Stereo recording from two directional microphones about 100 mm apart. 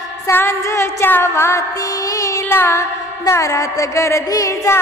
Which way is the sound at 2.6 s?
25° left (ahead or behind).